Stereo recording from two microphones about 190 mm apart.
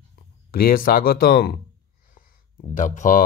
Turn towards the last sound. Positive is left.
turn(degrees=40)  # may be behind; listen again after turning